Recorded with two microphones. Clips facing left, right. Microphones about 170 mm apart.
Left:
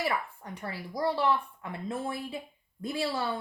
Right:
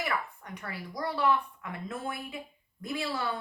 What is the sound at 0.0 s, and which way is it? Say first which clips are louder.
A woman's voice: left 2 dB; 30° left (ahead or behind).